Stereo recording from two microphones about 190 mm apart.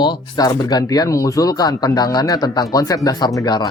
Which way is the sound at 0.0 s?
20° left (ahead or behind).